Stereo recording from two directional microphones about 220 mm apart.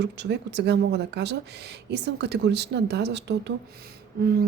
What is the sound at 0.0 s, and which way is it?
Speech, 50° right (ahead or behind).